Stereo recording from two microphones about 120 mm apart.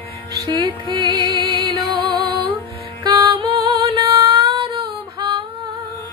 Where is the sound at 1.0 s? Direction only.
40° right (ahead or behind).